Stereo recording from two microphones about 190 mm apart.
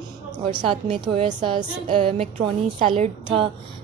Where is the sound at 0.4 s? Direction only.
35° right (ahead or behind).